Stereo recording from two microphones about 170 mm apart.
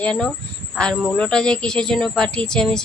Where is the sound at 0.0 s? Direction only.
5° left (ahead or behind).